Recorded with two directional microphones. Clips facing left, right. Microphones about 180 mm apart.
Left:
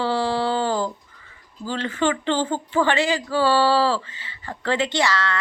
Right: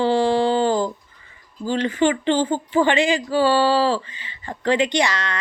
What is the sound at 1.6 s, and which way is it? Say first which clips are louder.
Speech: right 4 dB; 15° right (ahead or behind).